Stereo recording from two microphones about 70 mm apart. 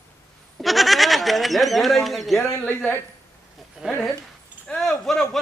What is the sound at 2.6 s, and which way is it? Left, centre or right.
Speech, left.